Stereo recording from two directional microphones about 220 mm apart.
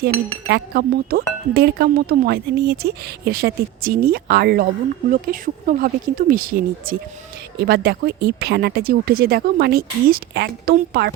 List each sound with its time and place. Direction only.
0.0 s speech: 45° right (ahead or behind)